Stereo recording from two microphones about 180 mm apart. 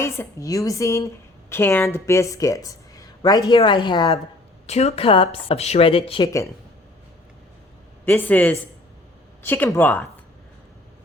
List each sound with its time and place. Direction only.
0.0 s a woman's voice: 15° left (ahead or behind)
6.2 s speech: 15° left (ahead or behind)
8.0 s speech: 10° left (ahead or behind)